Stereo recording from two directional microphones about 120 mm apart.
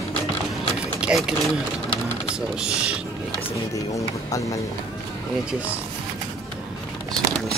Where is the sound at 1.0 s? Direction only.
5° right (ahead or behind).